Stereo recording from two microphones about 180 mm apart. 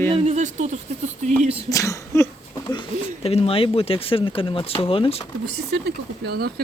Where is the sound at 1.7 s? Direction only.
15° left (ahead or behind).